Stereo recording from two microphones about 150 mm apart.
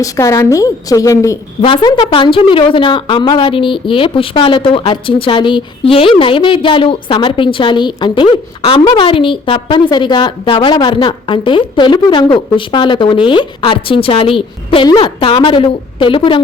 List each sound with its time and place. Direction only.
0.0 s a woman's voice: 20° left (ahead or behind)
1.6 s a woman's voice: 35° left (ahead or behind)